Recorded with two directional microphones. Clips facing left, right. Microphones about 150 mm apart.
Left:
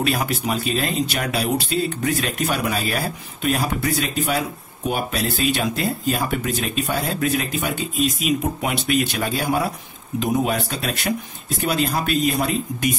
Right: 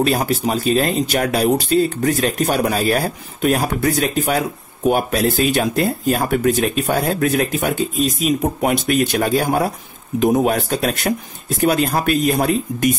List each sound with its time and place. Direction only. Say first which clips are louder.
0.0 s speech: right 5 dB; 35° right (ahead or behind)